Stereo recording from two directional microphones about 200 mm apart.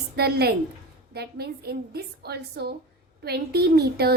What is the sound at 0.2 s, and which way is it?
A woman's voice, 55° right (ahead or behind).